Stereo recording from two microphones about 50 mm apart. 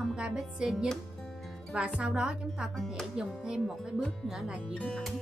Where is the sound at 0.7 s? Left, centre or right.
Centre.